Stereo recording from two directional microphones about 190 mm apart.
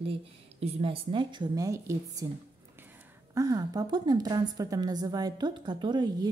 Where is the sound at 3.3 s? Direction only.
20° right (ahead or behind).